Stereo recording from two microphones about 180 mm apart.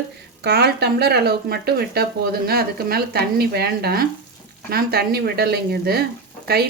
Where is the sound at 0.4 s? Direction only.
65° right (ahead or behind).